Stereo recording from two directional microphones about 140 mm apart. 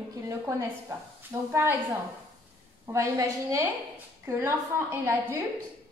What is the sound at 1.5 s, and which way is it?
Speech, 15° right (ahead or behind).